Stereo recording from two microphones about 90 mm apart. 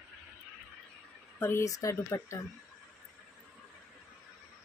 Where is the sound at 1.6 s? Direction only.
40° left (ahead or behind).